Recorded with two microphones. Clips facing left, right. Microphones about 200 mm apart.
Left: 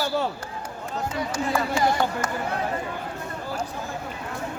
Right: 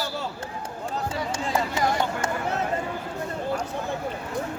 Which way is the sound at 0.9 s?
25° right (ahead or behind).